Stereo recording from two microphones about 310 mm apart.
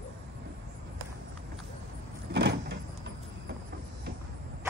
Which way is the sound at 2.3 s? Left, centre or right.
Right.